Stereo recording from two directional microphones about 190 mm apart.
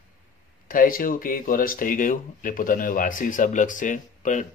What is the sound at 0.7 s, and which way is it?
Speech, 45° left (ahead or behind).